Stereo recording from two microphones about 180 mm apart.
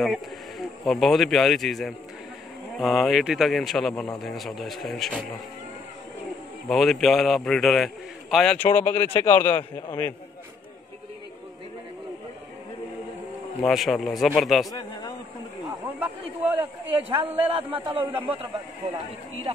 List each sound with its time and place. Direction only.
0.0 s a man's voice: centre (ahead or behind)
6.7 s a man's voice: centre (ahead or behind)
8.8 s a man's voice: 30° left (ahead or behind); by 9.7 s 15° left (ahead or behind)
13.6 s a man's voice: centre (ahead or behind)
14.7 s a man's voice: 20° left (ahead or behind)
16.0 s a man's voice: 10° right (ahead or behind)
17.5 s speech: 30° right (ahead or behind)